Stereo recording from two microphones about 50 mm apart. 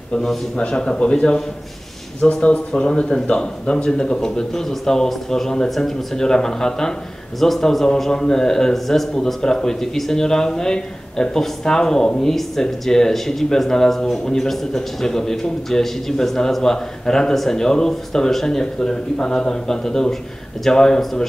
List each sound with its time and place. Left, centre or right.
0.6 s a man's voice: centre